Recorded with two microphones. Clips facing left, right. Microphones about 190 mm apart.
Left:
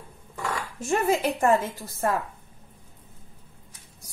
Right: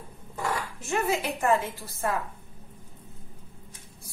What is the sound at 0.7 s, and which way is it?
A woman's voice, 45° left (ahead or behind).